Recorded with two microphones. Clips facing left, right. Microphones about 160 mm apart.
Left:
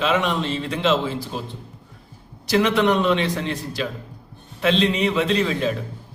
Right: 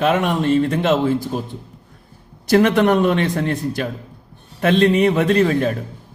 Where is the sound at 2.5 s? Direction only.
50° right (ahead or behind).